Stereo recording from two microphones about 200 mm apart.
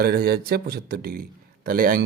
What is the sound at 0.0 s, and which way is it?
Speech, 50° right (ahead or behind).